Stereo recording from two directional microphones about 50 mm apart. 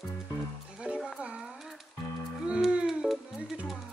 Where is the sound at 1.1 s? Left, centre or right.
Right.